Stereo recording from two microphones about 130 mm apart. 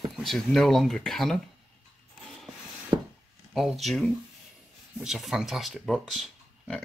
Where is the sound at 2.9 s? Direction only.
35° right (ahead or behind).